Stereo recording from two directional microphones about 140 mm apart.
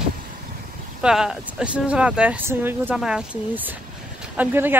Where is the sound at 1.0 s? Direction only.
5° right (ahead or behind).